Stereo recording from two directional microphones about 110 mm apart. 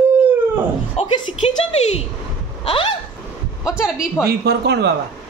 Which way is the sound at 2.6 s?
55° left (ahead or behind).